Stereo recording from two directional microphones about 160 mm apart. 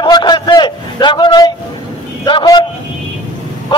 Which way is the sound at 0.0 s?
25° left (ahead or behind).